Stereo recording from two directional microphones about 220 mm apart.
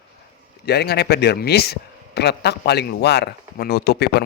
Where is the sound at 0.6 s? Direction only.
50° left (ahead or behind).